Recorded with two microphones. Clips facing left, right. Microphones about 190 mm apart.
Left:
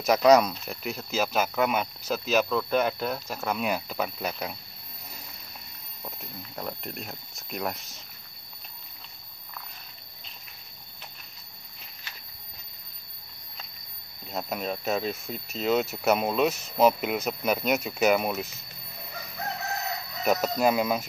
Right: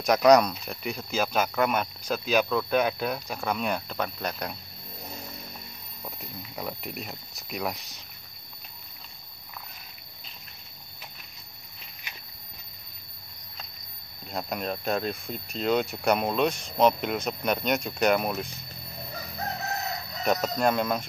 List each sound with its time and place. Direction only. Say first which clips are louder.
0.0 s speech: even; 5° left (ahead or behind)
6.0 s speech: even; 5° right (ahead or behind)
12.1 s walk: right 2 dB; 15° right (ahead or behind)
14.2 s speech: even; centre (ahead or behind)
20.2 s speech: left 1 dB; 5° left (ahead or behind)